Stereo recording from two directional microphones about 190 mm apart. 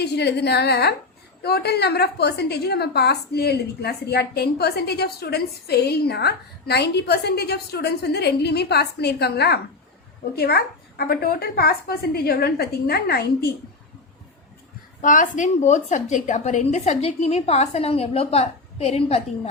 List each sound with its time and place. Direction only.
0.0 s a woman's voice: 60° left (ahead or behind)
15.0 s a woman's voice: 45° left (ahead or behind)